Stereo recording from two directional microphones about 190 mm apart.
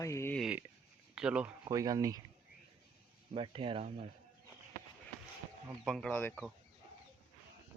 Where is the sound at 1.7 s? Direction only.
20° right (ahead or behind).